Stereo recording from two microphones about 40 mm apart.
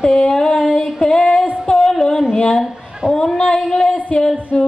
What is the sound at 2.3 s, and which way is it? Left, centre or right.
Speech, centre.